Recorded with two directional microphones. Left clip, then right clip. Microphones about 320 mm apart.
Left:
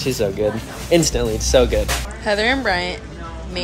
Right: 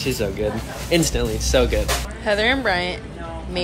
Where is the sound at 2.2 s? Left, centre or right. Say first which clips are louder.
Left 1 dB; centre.